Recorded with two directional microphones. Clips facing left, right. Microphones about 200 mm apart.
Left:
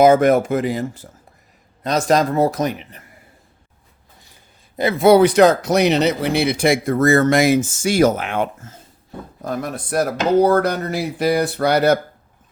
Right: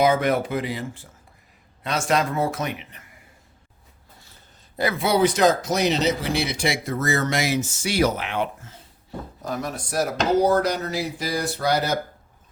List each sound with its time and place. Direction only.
0.0 s speech: 45° left (ahead or behind)
4.9 s speech: 55° left (ahead or behind)